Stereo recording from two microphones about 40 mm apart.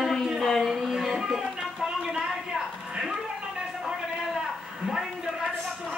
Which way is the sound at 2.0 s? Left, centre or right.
Centre.